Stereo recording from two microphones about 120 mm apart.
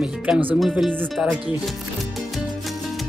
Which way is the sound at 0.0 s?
10° right (ahead or behind).